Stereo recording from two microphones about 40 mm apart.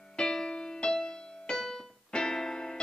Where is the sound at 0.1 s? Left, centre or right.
Centre.